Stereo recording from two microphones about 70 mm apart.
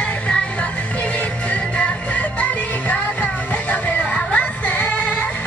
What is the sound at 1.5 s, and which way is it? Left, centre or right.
Music, centre.